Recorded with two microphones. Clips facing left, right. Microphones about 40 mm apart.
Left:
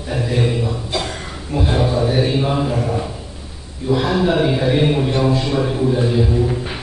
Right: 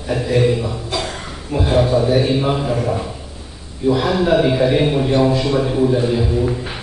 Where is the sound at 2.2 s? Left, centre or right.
Centre.